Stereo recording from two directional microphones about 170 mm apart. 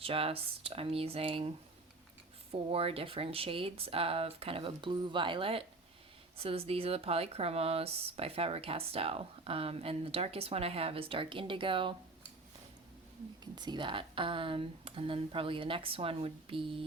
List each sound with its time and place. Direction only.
0.0 s speech: 35° right (ahead or behind)
13.4 s speech: 25° right (ahead or behind)